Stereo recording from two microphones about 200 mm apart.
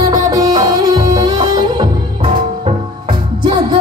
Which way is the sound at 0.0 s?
20° right (ahead or behind).